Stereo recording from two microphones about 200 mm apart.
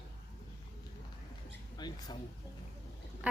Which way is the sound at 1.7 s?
20° left (ahead or behind).